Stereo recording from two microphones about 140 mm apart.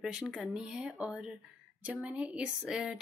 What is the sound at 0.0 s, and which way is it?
Speech, centre (ahead or behind).